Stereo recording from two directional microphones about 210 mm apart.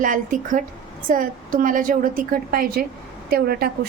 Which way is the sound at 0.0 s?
40° right (ahead or behind).